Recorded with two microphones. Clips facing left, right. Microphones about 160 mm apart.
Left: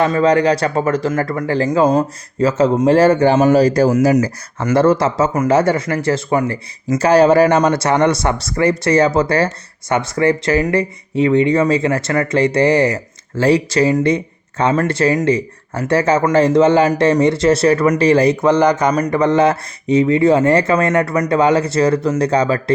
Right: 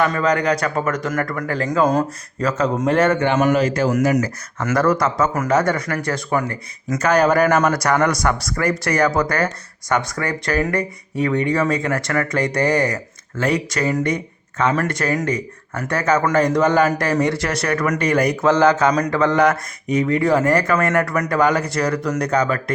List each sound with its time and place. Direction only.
0.0 s speech: 30° left (ahead or behind)
18.4 s speech: 15° left (ahead or behind)